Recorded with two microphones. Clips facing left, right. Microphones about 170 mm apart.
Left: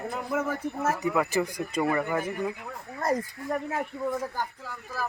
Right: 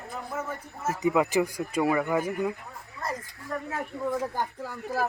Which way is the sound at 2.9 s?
45° left (ahead or behind).